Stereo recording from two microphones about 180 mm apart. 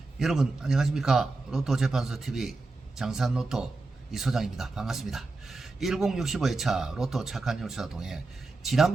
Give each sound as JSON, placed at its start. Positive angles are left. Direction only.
{"t": 0.2, "sound": "speech", "side_deg": 0}